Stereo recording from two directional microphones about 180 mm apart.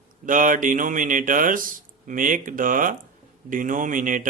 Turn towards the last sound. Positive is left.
turn(degrees=-45)  # may be behind; listen again after turning